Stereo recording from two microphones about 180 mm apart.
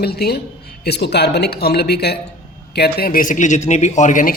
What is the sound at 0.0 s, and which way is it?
A man's voice, 60° left (ahead or behind).